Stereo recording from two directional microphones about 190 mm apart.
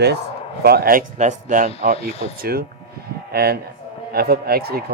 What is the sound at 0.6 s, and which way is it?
A man's voice, 55° right (ahead or behind).